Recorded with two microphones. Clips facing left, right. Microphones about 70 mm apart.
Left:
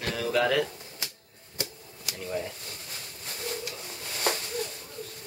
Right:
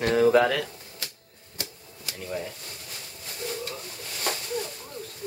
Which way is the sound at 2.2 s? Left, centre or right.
Centre.